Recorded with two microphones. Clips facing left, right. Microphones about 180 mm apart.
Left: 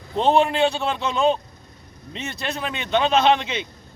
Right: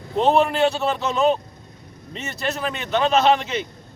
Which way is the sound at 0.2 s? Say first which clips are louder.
Even; 5° right (ahead or behind).